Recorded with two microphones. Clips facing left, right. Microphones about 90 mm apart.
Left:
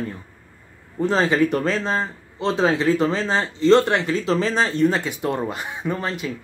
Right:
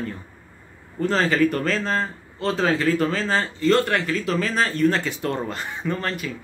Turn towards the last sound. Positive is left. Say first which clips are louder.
# left 1 dB
turn(degrees=15)  # may be behind; listen again after turning